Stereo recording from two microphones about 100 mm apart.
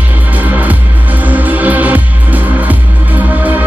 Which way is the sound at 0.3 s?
15° right (ahead or behind).